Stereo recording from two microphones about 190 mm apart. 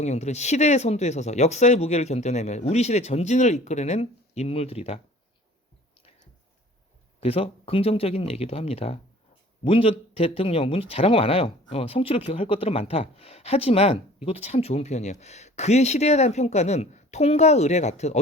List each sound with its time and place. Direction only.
0.0 s speech: 35° left (ahead or behind)
7.2 s speech: 30° left (ahead or behind)